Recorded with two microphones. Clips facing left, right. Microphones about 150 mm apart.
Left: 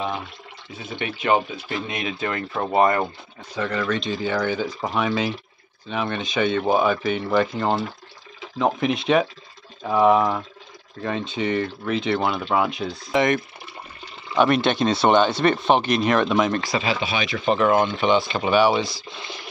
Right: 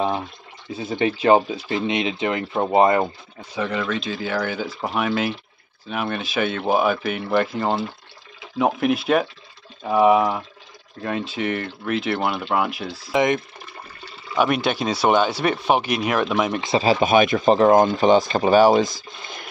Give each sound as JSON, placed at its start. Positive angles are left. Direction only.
{"t": 0.8, "sound": "speech", "side_deg": -30}
{"t": 3.5, "sound": "speech", "side_deg": -10}
{"t": 13.1, "sound": "speech", "side_deg": -20}
{"t": 14.3, "sound": "speech", "side_deg": -5}
{"t": 16.8, "sound": "speech", "side_deg": -45}
{"t": 17.5, "sound": "speech", "side_deg": -35}